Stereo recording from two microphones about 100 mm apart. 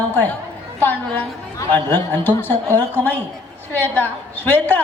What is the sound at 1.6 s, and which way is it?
A woman's voice, 20° left (ahead or behind).